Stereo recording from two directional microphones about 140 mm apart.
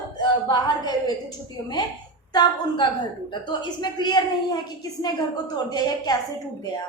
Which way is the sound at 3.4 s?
30° left (ahead or behind).